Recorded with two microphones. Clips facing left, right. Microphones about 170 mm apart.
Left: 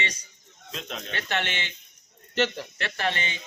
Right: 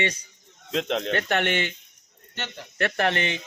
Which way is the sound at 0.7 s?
75° right (ahead or behind).